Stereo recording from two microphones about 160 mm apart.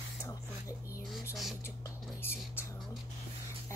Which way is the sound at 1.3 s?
Centre (ahead or behind).